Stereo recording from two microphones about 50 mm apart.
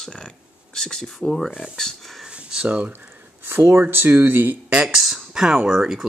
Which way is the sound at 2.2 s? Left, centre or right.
Centre.